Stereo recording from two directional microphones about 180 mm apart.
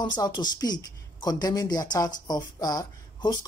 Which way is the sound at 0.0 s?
25° left (ahead or behind).